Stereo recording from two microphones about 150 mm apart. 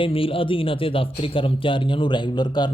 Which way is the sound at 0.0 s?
35° left (ahead or behind).